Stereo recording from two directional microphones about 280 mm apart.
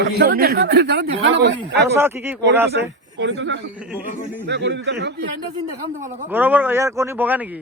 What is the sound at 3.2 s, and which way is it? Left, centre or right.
Speech, right.